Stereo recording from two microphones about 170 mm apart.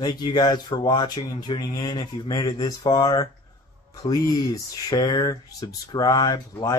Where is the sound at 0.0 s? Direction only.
25° left (ahead or behind).